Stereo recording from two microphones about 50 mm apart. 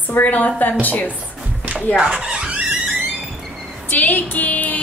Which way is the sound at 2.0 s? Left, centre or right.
Centre.